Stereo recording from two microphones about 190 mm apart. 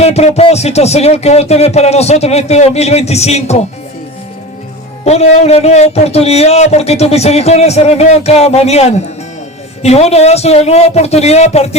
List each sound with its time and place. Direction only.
0.0 s a man's voice: 35° left (ahead or behind)
5.0 s a man's voice: 35° left (ahead or behind)